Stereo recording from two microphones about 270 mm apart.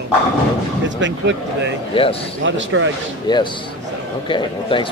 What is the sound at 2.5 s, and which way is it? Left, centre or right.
Speech, right.